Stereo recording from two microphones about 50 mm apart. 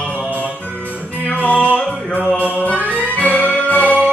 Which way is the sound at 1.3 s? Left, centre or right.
Left.